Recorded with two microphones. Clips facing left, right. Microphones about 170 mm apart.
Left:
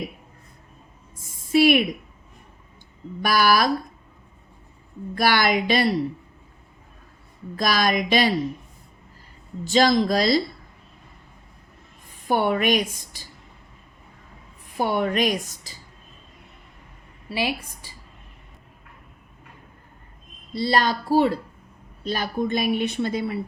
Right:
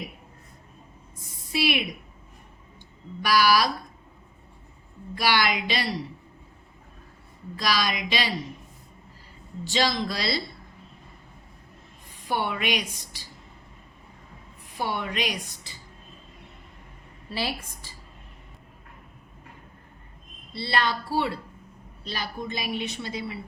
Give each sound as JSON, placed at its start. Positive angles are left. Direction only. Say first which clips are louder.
{"t": 1.5, "sound": "a woman's voice", "louder": "left 9 dB", "side_deg": 50}
{"t": 3.2, "sound": "a woman's voice", "louder": "left 2 dB", "side_deg": 50}
{"t": 5.1, "sound": "a woman's voice", "louder": "left 4 dB", "side_deg": 50}
{"t": 7.5, "sound": "a woman's voice", "louder": "left 5 dB", "side_deg": 50}
{"t": 9.6, "sound": "a woman's voice", "louder": "left 8 dB", "side_deg": 45}
{"t": 12.3, "sound": "a woman's voice", "louder": "left 7 dB", "side_deg": 45}
{"t": 14.8, "sound": "a woman's voice", "louder": "left 7 dB", "side_deg": 45}
{"t": 17.2, "sound": "a woman's voice", "louder": "left 5 dB", "side_deg": 15}
{"t": 20.5, "sound": "a woman's voice", "louder": "left 5 dB", "side_deg": 40}